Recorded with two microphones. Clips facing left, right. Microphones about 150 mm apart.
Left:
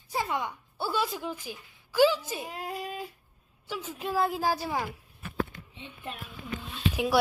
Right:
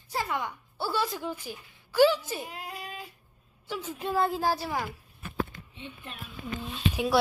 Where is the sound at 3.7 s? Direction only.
5° left (ahead or behind).